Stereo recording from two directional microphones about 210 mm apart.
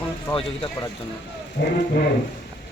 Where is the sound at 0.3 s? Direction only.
15° left (ahead or behind).